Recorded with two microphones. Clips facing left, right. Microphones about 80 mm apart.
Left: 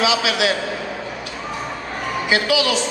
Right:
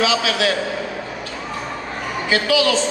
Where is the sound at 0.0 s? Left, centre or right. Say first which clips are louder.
Even; centre.